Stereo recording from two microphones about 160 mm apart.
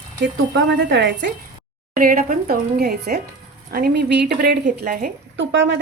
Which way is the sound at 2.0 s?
60° right (ahead or behind).